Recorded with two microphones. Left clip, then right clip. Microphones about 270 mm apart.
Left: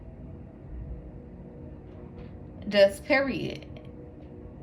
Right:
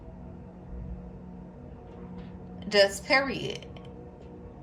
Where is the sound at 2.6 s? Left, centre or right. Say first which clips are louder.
Left 2 dB; centre.